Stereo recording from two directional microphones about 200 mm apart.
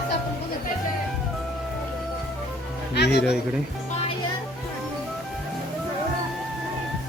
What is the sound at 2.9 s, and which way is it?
Speech, 55° left (ahead or behind).